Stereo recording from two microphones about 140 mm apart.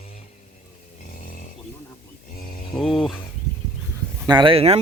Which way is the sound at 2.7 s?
Centre (ahead or behind).